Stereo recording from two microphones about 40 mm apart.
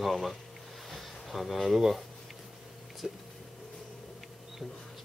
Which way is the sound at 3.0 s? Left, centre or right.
Centre.